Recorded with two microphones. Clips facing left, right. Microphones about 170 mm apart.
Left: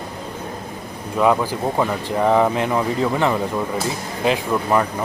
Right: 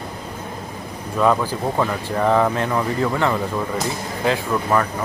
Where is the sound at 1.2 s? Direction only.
10° left (ahead or behind).